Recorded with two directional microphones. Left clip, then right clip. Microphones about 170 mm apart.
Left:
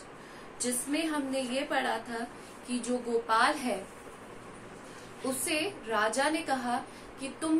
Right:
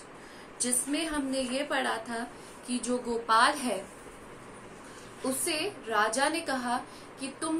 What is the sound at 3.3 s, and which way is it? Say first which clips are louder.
Speech: right 3 dB; 35° right (ahead or behind).